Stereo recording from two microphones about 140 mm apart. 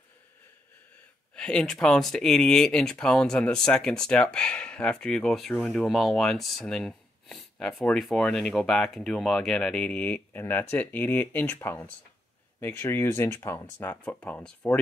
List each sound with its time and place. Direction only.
1.3 s speech: 5° left (ahead or behind)